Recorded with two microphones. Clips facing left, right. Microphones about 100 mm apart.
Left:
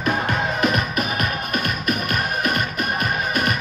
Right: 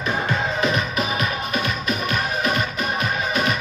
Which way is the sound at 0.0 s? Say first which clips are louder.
Left 1 dB; 60° left (ahead or behind).